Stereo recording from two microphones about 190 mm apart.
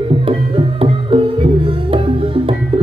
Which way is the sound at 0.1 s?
30° right (ahead or behind).